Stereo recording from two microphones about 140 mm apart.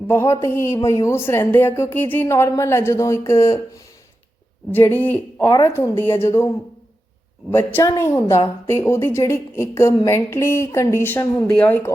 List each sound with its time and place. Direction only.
0.1 s speech: 20° left (ahead or behind)
4.7 s speech: 15° left (ahead or behind)
7.5 s speech: 20° left (ahead or behind)